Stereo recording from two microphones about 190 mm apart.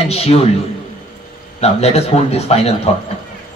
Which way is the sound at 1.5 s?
35° left (ahead or behind).